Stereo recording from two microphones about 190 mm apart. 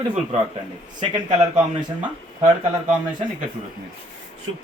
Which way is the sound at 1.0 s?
20° right (ahead or behind).